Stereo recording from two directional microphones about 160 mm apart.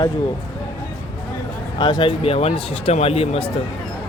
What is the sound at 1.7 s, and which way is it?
Speech, 30° left (ahead or behind).